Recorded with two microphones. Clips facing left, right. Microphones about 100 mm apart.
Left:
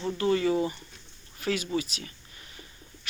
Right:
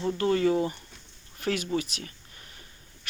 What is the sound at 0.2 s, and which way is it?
Speech, 40° right (ahead or behind).